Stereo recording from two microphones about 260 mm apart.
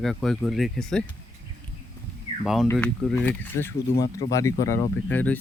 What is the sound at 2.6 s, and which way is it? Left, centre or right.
Speech, centre.